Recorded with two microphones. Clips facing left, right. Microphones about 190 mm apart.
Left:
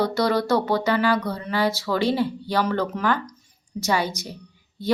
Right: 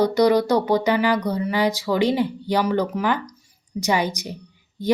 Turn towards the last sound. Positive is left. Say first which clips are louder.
# right 3 dB
turn(degrees=-15)  # may be behind; listen again after turning